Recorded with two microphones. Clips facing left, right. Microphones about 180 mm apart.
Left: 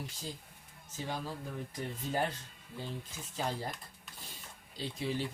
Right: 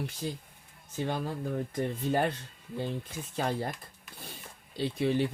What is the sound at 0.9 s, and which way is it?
Speech, 60° right (ahead or behind).